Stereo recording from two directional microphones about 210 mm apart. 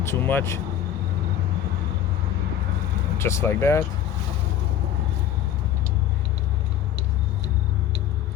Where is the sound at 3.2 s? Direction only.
15° left (ahead or behind).